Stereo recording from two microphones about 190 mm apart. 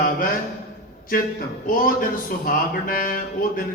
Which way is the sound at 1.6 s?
45° left (ahead or behind).